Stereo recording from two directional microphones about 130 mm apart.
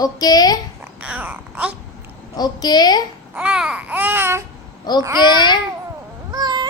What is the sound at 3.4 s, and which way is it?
Babbling, 10° right (ahead or behind).